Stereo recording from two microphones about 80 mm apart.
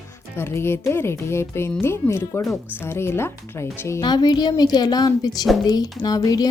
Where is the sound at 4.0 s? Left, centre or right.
Left.